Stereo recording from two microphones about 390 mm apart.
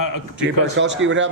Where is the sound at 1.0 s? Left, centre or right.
Right.